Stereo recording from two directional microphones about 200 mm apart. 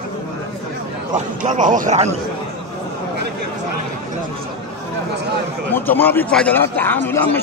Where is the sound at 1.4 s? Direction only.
40° right (ahead or behind).